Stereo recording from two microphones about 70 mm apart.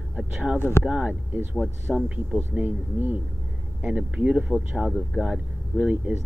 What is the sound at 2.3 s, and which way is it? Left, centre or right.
Speech, right.